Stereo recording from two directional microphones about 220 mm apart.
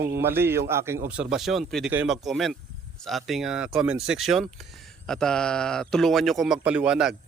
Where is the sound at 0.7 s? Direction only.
10° right (ahead or behind).